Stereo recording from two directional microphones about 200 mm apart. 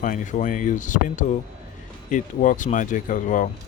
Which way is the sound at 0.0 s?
40° left (ahead or behind).